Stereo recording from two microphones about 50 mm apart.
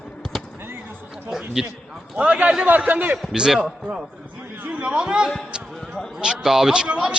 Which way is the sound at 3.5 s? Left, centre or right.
Centre.